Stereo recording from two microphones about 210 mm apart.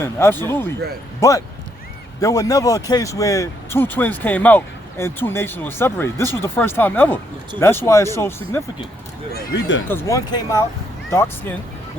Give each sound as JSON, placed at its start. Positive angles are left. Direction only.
{"t": 0.0, "sound": "speech", "side_deg": 10}
{"t": 2.2, "sound": "speech", "side_deg": 15}
{"t": 9.3, "sound": "speech", "side_deg": 60}
{"t": 9.9, "sound": "speech", "side_deg": 15}